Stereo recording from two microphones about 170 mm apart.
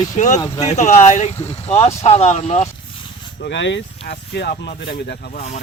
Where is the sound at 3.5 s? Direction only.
90° left; by 4.7 s 60° left (ahead or behind).